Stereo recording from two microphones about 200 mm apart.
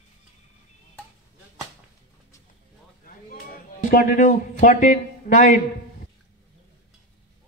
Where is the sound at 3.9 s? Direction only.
45° left (ahead or behind).